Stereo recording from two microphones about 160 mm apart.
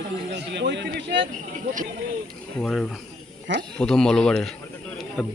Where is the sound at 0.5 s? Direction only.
90° right.